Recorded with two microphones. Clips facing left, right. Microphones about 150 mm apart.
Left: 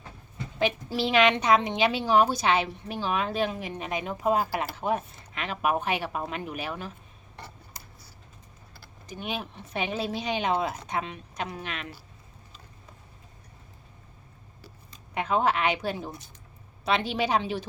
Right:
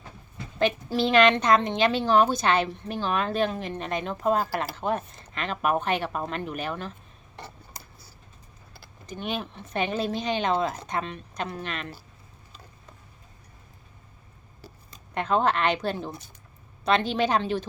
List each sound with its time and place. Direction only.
0.6 s a woman's voice: 5° left (ahead or behind)
9.0 s a woman's voice: 5° left (ahead or behind)
15.1 s a woman's voice: 5° left (ahead or behind)